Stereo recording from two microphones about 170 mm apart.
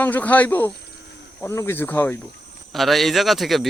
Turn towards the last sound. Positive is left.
turn(degrees=0)  # may be behind; listen again after turning